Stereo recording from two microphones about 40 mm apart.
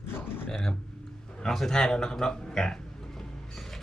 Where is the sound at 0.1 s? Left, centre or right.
Left.